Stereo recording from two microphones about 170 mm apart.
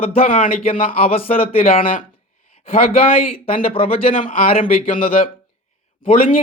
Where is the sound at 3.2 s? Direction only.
35° left (ahead or behind).